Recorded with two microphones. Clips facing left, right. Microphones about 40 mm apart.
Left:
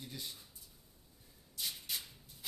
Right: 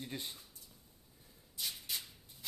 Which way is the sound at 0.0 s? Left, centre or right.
Right.